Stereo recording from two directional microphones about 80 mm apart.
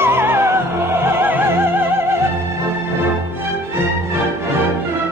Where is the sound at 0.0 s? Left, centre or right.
Right.